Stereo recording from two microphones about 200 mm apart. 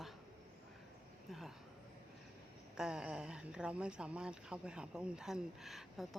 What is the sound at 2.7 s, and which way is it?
Speech, 5° right (ahead or behind).